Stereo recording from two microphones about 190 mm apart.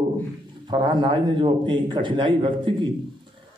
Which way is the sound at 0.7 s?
25° right (ahead or behind).